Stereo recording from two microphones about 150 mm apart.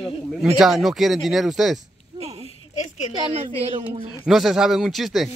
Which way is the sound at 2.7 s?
50° left (ahead or behind).